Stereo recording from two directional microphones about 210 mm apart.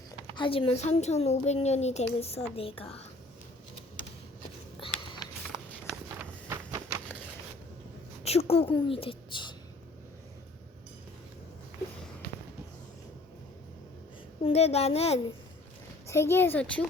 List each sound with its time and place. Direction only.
0.1 s a child's voice: 20° left (ahead or behind)
6.1 s a sound: 10° right (ahead or behind)
8.2 s a woman's voice: 30° left (ahead or behind)
14.4 s a child's voice: 30° left (ahead or behind)
16.0 s speech: 10° left (ahead or behind)